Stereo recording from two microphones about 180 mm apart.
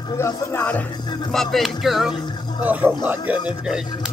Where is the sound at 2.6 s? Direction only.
10° right (ahead or behind).